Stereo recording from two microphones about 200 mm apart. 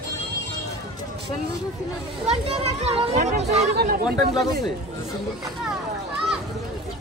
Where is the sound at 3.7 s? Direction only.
50° right (ahead or behind).